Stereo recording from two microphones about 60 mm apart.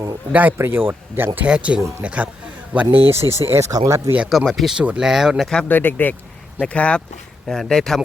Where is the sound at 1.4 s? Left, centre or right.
Centre.